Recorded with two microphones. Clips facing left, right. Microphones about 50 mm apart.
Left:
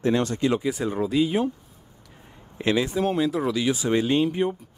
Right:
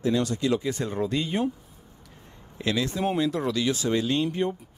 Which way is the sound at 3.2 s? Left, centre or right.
Centre.